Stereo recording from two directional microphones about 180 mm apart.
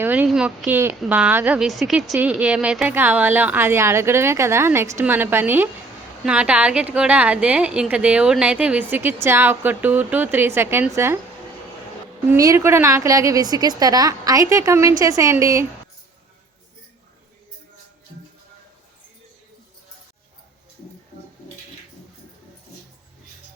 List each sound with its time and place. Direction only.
0.0 s a woman's voice: 10° right (ahead or behind)
12.3 s a woman's voice: 15° right (ahead or behind)